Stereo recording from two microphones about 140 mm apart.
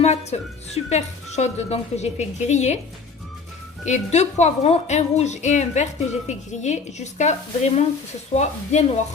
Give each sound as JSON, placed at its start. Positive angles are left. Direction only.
{"t": 0.0, "sound": "a woman's voice", "side_deg": 50}
{"t": 3.8, "sound": "a woman's voice", "side_deg": 55}